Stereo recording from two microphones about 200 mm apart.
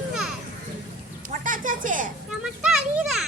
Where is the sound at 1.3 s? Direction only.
40° right (ahead or behind).